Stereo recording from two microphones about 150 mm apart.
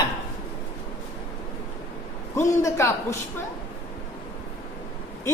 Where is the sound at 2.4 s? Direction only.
20° left (ahead or behind).